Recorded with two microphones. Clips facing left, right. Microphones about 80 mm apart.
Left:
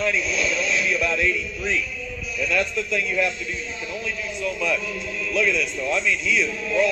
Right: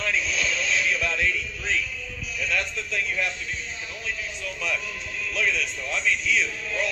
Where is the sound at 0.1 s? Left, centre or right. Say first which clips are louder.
Left 3 dB; left.